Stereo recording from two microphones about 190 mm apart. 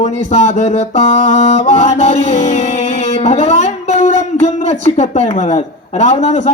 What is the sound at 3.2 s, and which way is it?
Speech, 35° left (ahead or behind).